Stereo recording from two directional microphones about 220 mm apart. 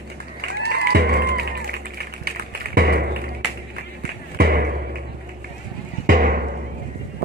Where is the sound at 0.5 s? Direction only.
45° right (ahead or behind).